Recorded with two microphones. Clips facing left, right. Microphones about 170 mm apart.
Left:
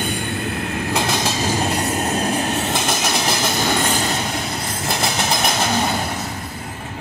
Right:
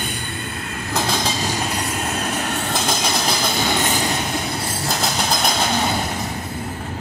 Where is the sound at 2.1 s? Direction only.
25° left (ahead or behind).